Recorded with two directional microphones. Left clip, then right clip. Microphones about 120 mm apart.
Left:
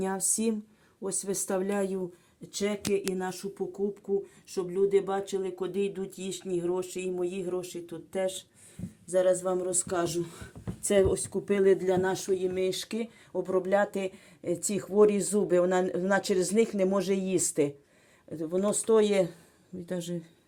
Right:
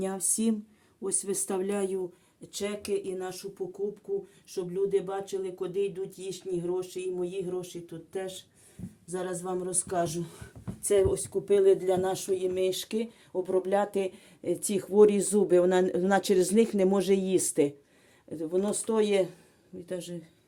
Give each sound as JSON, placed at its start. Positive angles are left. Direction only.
{"t": 0.0, "sound": "speech", "side_deg": 0}
{"t": 2.6, "sound": "speech", "side_deg": 10}
{"t": 3.2, "sound": "speech", "side_deg": 30}
{"t": 14.4, "sound": "speech", "side_deg": -15}
{"t": 18.3, "sound": "speech", "side_deg": -5}